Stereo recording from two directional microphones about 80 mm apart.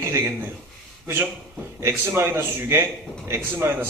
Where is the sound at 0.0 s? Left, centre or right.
Right.